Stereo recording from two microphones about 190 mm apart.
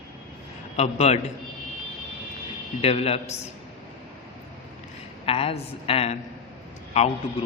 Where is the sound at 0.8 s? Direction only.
35° left (ahead or behind).